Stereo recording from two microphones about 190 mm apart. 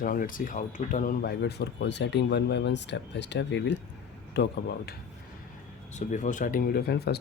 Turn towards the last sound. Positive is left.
turn(degrees=60)  # may be behind; listen again after turning